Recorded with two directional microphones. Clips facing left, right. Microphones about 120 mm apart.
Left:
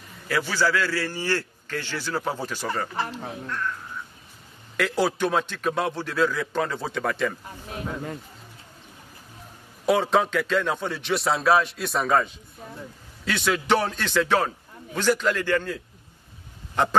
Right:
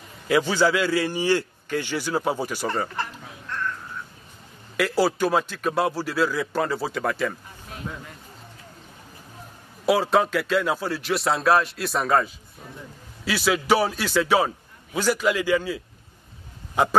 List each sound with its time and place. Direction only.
0.3 s a man's voice: 20° right (ahead or behind)
2.7 s a man's voice: centre (ahead or behind)
4.7 s a man's voice: 5° right (ahead or behind)
9.8 s a man's voice: 5° right (ahead or behind)